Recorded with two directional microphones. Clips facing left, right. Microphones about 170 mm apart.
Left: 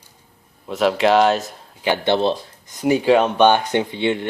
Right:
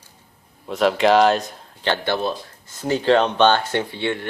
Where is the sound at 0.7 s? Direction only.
Centre (ahead or behind).